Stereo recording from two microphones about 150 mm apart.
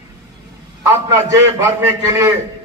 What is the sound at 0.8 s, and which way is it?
A man's voice, 20° right (ahead or behind).